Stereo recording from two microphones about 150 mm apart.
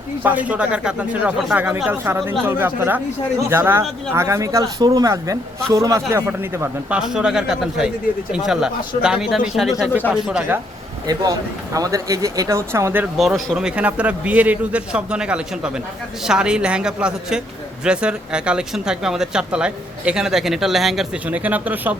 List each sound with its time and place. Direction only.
0.2 s a man's voice: 10° right (ahead or behind)
7.0 s a man's voice: 5° right (ahead or behind)
11.0 s speech: 25° right (ahead or behind)
13.1 s a man's voice: centre (ahead or behind)